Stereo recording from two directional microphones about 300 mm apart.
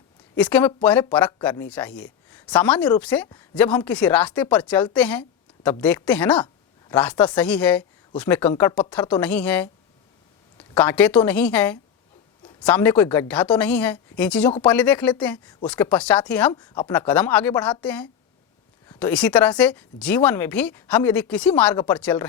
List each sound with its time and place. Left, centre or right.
0.3 s speech: centre
10.8 s speech: centre